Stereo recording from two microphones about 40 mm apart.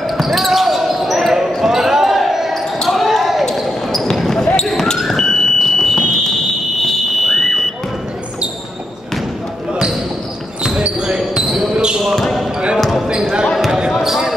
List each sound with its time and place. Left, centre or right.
0.0 s basketball bounce: centre
4.9 s fire alarm: centre
10.8 s basketball bounce: centre
12.2 s basketball bounce: centre
12.9 s basketball bounce: centre